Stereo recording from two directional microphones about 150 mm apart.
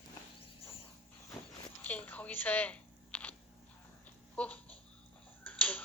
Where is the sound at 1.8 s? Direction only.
10° left (ahead or behind).